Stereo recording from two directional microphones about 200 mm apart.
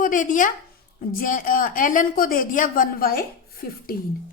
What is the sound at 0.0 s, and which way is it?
A woman's voice, 40° left (ahead or behind).